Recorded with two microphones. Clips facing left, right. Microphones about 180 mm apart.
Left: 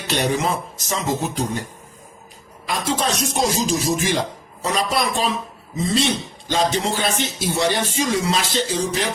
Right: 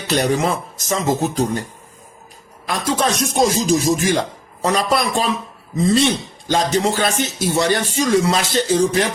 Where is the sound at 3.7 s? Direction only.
50° right (ahead or behind).